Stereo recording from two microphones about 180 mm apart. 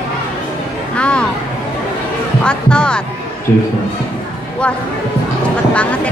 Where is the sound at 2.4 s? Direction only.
5° left (ahead or behind).